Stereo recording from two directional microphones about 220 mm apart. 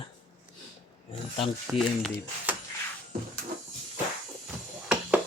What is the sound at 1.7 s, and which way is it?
Speech, centre (ahead or behind).